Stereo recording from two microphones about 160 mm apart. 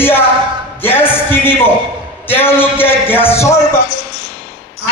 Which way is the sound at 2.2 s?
15° left (ahead or behind).